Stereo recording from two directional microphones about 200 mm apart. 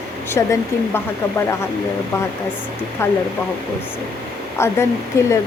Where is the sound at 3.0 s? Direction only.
15° left (ahead or behind).